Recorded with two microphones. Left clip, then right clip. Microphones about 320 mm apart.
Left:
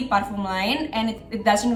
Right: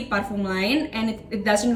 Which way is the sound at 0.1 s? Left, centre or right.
Left.